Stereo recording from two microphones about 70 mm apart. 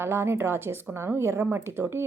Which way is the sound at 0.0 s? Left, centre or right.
Right.